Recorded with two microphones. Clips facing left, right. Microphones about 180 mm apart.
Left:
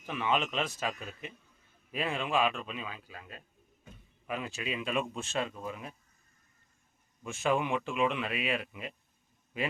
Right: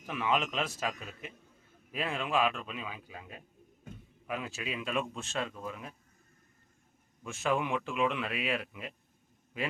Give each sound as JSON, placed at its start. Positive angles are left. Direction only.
{"t": 0.0, "sound": "speech", "side_deg": -5}
{"t": 3.0, "sound": "a man's voice", "side_deg": -15}
{"t": 4.3, "sound": "speech", "side_deg": 0}
{"t": 7.3, "sound": "speech", "side_deg": 0}